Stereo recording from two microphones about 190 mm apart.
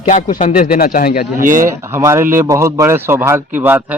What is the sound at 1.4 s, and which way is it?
Speech, 45° right (ahead or behind).